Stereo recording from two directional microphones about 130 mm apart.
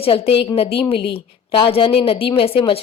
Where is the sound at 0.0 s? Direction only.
50° left (ahead or behind).